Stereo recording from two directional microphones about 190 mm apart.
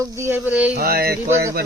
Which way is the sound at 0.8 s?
55° right (ahead or behind).